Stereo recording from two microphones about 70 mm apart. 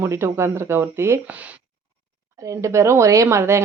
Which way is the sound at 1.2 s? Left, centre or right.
Right.